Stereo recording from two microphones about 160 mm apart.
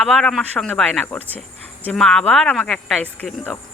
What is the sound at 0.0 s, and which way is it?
Speech, centre (ahead or behind).